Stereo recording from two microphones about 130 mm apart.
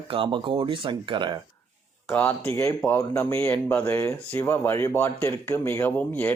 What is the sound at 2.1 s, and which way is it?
Speech, 10° left (ahead or behind).